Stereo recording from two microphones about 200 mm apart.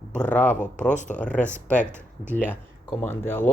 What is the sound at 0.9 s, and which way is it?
Speech, 35° left (ahead or behind).